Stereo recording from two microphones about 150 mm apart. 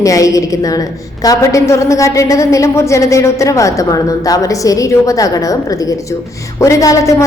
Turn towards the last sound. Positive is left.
turn(degrees=20)  # may be behind; listen again after turning